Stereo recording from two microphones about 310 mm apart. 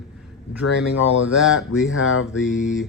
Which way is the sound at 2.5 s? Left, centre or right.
Left.